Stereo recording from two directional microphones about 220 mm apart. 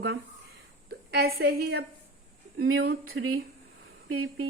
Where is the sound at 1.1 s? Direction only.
45° right (ahead or behind).